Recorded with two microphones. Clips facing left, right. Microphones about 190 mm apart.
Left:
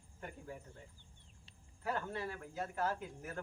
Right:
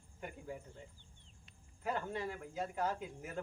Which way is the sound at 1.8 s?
15° right (ahead or behind).